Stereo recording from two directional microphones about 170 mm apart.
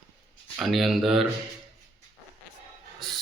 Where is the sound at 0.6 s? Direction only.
Centre (ahead or behind).